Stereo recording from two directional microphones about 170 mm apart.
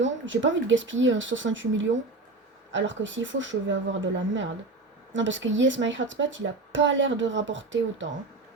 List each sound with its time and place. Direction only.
0.0 s speech: 90° right